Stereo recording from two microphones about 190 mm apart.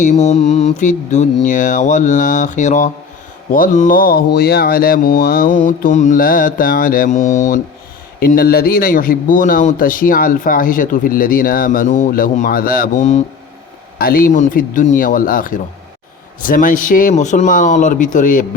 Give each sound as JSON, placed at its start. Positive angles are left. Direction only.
{"t": 0.0, "sound": "a man's voice", "side_deg": 40}
{"t": 14.0, "sound": "a man's voice", "side_deg": 50}